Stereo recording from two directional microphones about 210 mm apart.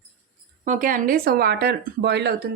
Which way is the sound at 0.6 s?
40° right (ahead or behind).